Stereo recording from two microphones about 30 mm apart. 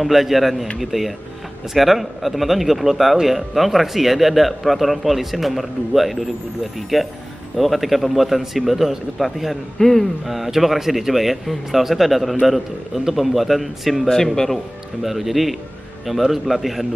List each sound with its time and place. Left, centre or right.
0.0 s a man's voice: centre
9.8 s a man's voice: centre
10.2 s a man's voice: centre
14.0 s a man's voice: centre
15.0 s a man's voice: centre